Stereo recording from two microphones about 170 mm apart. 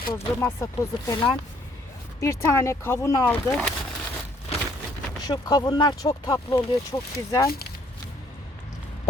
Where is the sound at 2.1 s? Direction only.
15° left (ahead or behind).